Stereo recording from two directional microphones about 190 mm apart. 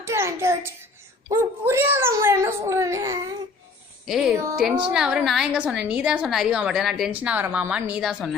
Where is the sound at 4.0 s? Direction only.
Centre (ahead or behind).